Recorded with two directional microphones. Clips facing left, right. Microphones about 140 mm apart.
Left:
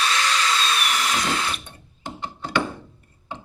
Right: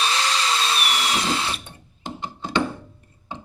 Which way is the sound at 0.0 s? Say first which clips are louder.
Even; 30° right (ahead or behind).